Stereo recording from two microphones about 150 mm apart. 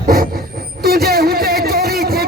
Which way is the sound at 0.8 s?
90° right.